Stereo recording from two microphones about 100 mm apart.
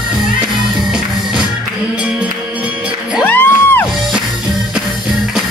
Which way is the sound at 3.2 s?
20° left (ahead or behind).